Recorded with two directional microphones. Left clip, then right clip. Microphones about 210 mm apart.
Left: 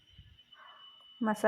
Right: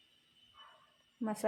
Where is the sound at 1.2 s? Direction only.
15° left (ahead or behind).